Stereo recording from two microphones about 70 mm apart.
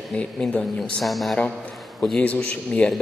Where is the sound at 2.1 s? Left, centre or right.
Left.